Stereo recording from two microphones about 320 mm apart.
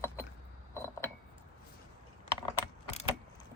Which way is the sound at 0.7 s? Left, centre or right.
Centre.